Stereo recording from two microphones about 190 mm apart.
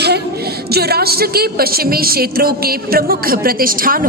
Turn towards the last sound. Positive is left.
turn(degrees=-50)  # may be behind; listen again after turning